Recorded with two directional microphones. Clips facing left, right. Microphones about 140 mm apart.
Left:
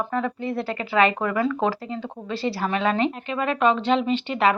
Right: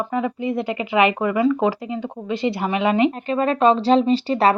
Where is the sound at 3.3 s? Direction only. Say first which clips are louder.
Right 4 dB; 35° right (ahead or behind).